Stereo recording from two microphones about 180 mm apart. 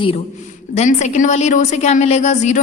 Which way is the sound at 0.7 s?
40° left (ahead or behind).